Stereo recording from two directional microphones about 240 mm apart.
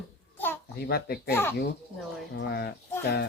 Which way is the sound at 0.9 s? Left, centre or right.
Left.